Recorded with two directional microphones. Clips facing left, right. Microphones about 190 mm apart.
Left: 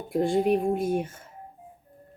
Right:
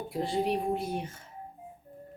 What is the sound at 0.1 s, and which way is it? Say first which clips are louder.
Speech: left 7 dB; 50° left (ahead or behind).